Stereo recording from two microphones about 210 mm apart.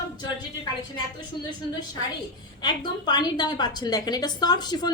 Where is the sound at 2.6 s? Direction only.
20° left (ahead or behind).